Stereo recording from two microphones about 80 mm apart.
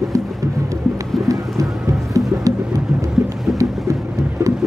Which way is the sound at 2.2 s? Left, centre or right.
Right.